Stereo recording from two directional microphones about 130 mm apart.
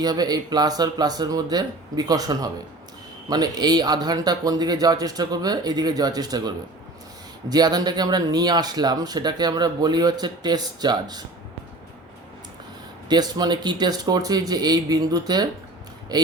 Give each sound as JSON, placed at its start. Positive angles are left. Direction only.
{"t": 0.0, "sound": "speech", "side_deg": -30}
{"t": 7.5, "sound": "speech", "side_deg": -30}
{"t": 13.1, "sound": "speech", "side_deg": -30}